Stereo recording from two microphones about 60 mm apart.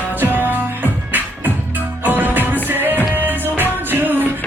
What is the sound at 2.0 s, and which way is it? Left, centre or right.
Music, right.